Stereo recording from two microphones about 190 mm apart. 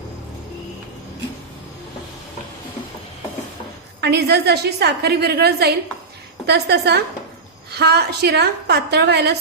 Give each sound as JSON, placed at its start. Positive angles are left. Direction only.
{"t": 4.0, "sound": "a woman's voice", "side_deg": -60}